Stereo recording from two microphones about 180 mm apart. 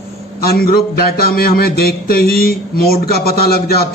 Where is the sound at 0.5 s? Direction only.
55° left (ahead or behind).